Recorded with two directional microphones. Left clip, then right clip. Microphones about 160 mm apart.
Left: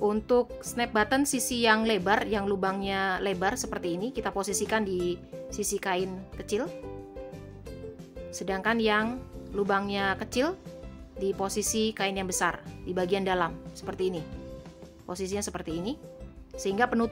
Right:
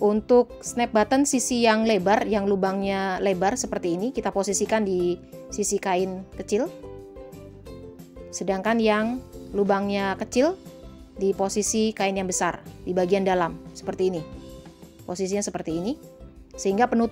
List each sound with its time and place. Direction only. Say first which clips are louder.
0.0 s a woman's voice: right 6 dB; 20° right (ahead or behind)
8.3 s a woman's voice: right 4 dB; 20° right (ahead or behind)